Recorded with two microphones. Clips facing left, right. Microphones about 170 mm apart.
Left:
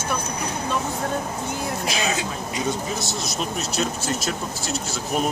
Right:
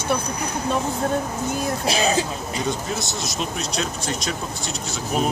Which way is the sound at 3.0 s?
Centre (ahead or behind).